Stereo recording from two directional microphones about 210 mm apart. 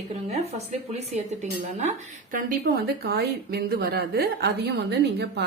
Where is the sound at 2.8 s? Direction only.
50° right (ahead or behind).